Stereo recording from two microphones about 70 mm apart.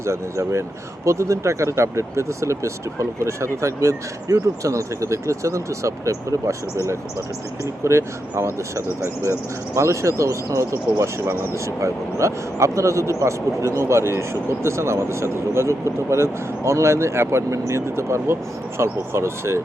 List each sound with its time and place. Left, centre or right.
0.0 s speech: right